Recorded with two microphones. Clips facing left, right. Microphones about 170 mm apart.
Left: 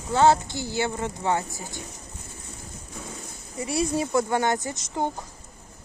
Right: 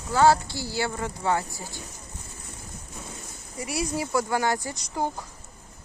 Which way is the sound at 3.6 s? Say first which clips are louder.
Left 4 dB; 25° left (ahead or behind).